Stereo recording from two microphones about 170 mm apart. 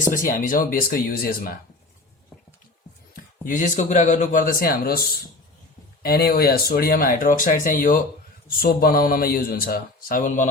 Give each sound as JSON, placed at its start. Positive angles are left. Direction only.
{"t": 0.1, "sound": "speech", "side_deg": 55}
{"t": 3.4, "sound": "speech", "side_deg": 50}
{"t": 6.0, "sound": "speech", "side_deg": 65}